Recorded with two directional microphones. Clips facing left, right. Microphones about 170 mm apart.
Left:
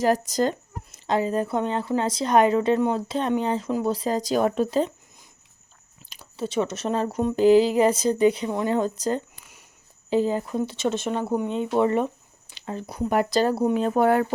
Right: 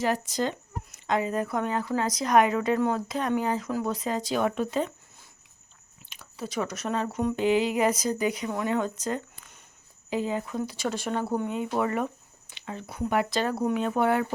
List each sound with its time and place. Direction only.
0.0 s speech: 40° left (ahead or behind)
6.1 s speech: 30° left (ahead or behind)
9.4 s a sound: 10° left (ahead or behind)
10.1 s speech: 30° left (ahead or behind)
10.6 s speech: 25° left (ahead or behind); by 14.3 s 40° left (ahead or behind)